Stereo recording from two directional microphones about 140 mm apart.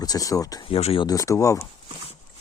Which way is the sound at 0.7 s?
45° left (ahead or behind).